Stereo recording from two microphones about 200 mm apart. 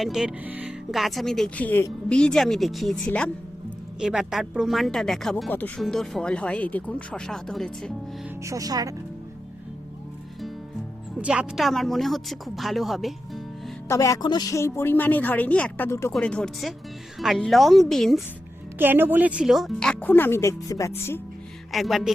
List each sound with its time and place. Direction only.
0.0 s speech: centre (ahead or behind)
8.4 s speech: 15° right (ahead or behind)
11.2 s speech: 5° right (ahead or behind)
13.8 s a woman's voice: 15° left (ahead or behind)
18.8 s speech: 10° right (ahead or behind); by 21.2 s 10° left (ahead or behind)
21.7 s speech: centre (ahead or behind)